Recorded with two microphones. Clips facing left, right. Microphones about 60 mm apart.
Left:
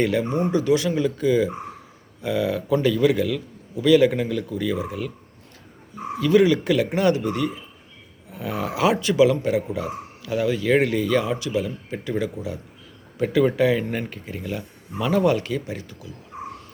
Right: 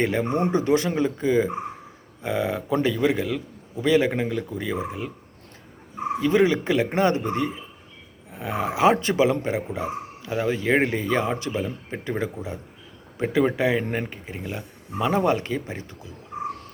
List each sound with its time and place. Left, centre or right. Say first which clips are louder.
0.0 s a man's voice: left 1 dB; right
6.1 s a man's voice: left 3 dB; right